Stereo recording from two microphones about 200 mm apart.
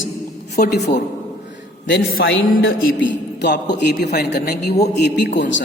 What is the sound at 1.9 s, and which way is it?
Speech, 65° left (ahead or behind).